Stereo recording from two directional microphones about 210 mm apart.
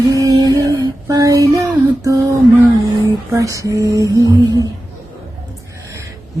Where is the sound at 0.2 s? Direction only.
15° right (ahead or behind).